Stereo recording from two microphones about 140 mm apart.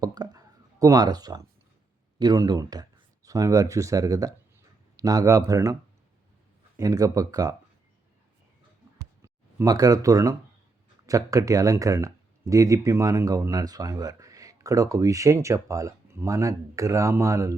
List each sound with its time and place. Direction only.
0.0 s a sound: 30° right (ahead or behind)
2.1 s speech: 25° right (ahead or behind)
6.7 s speech: 25° right (ahead or behind)
9.2 s speech: 20° right (ahead or behind)